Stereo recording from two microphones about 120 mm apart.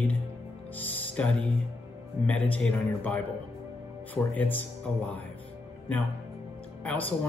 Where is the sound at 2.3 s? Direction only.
10° left (ahead or behind).